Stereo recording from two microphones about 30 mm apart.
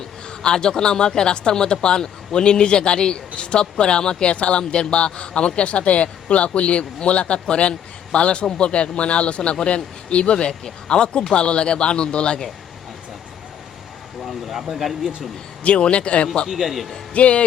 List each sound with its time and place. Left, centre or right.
0.4 s a man's voice: left
4.7 s speech: left
5.6 s a man's voice: left
10.3 s a man's voice: left
14.2 s speech: centre
15.6 s speech: left
16.5 s a man's voice: centre
17.2 s speech: left